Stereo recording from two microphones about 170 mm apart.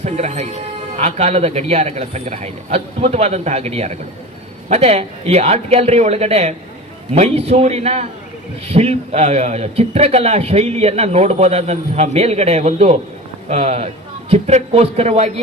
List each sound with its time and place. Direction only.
0.0 s a man's voice: 40° right (ahead or behind)